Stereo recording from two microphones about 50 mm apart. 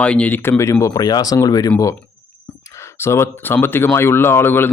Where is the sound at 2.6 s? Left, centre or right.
Left.